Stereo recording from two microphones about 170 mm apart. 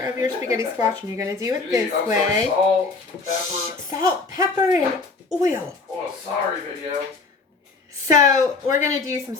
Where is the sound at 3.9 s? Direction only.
20° right (ahead or behind).